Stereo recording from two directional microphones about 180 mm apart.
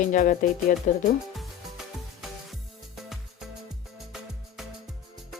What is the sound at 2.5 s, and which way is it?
Music, centre (ahead or behind).